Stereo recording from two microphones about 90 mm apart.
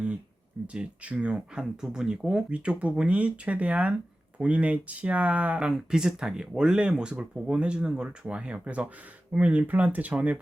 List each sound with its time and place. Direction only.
0.7 s speech: 15° right (ahead or behind)